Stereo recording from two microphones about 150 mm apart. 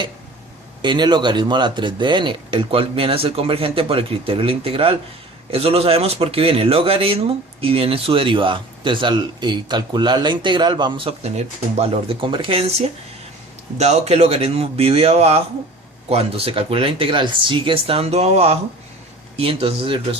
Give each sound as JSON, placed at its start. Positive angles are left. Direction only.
{"t": 0.8, "sound": "speech", "side_deg": -30}